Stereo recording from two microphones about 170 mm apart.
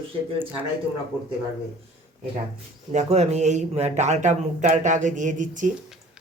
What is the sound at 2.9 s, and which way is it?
A man's voice, 40° right (ahead or behind).